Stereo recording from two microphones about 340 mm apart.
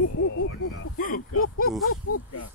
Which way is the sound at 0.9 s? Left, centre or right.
Left.